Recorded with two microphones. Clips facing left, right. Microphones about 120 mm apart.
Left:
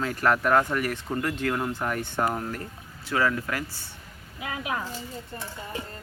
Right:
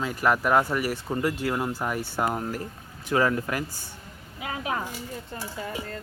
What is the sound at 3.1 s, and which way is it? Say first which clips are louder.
Speech: right 2 dB; 25° right (ahead or behind).